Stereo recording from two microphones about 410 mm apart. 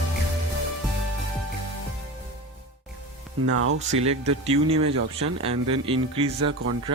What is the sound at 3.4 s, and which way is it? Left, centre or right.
Speech, right.